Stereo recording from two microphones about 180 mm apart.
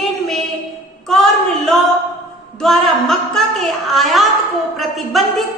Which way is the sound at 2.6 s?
Centre (ahead or behind).